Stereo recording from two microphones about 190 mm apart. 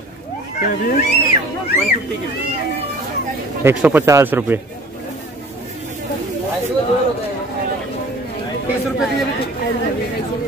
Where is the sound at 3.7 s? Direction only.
10° right (ahead or behind).